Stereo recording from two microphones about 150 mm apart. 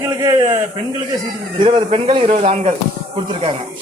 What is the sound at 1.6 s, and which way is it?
Speech, 35° right (ahead or behind).